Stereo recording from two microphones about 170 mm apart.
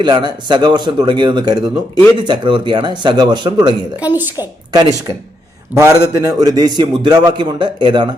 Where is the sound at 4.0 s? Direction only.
10° right (ahead or behind).